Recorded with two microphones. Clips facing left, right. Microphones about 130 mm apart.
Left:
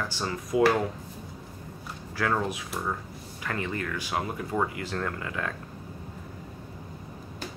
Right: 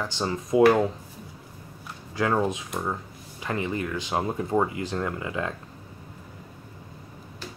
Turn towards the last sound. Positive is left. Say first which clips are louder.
# right 3 dB
turn(degrees=-20)  # may be behind; listen again after turning